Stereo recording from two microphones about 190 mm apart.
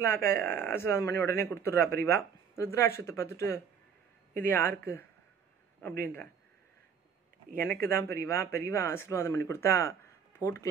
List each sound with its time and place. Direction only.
0.0 s speech: 15° left (ahead or behind)
7.5 s speech: 10° left (ahead or behind)